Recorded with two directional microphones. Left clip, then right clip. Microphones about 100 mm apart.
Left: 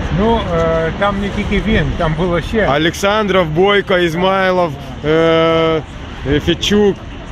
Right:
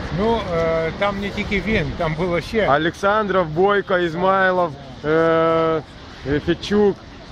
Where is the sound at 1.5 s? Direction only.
45° right (ahead or behind).